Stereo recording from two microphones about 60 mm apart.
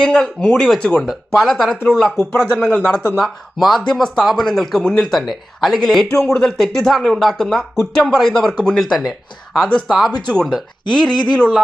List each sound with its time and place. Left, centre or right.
0.0 s speech: centre
3.2 s speech: centre
10.1 s speech: centre